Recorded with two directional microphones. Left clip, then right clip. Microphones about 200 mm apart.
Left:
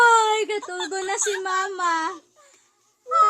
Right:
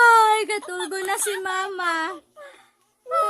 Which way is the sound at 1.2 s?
10° right (ahead or behind).